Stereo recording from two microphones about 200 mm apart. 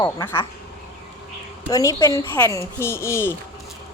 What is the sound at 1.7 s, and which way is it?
A woman's voice, 20° left (ahead or behind).